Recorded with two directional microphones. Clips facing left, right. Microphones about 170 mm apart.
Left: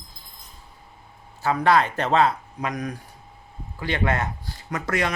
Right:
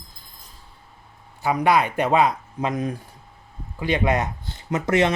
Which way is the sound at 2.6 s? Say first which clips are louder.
Right 5 dB; 25° right (ahead or behind).